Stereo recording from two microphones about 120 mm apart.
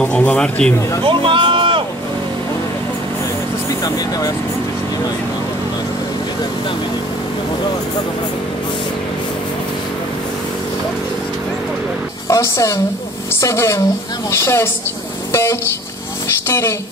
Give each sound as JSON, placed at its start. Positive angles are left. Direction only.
{"t": 0.0, "sound": "speech", "side_deg": 10}
{"t": 1.0, "sound": "music", "side_deg": -45}
{"t": 12.3, "sound": "a woman's voice", "side_deg": 25}
{"t": 16.4, "sound": "a woman's voice", "side_deg": 20}